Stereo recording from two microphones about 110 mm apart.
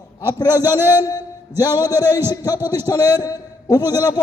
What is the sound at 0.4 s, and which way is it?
Speech, 20° right (ahead or behind).